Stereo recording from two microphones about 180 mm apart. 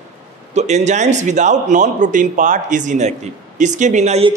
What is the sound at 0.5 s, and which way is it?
A man's voice, 40° right (ahead or behind).